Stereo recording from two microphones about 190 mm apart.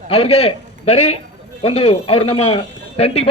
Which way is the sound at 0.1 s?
35° left (ahead or behind).